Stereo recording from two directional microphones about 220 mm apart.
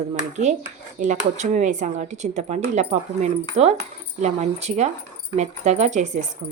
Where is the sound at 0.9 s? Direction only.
35° right (ahead or behind).